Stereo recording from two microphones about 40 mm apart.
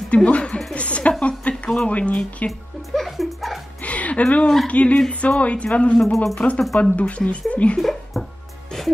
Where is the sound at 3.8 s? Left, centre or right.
Left.